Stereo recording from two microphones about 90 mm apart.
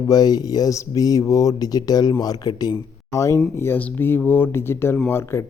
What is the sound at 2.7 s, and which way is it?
Speech, 35° left (ahead or behind).